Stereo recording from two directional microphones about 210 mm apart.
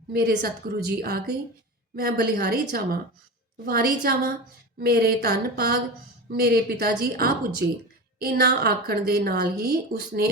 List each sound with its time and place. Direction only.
0.1 s a woman's voice: 45° right (ahead or behind)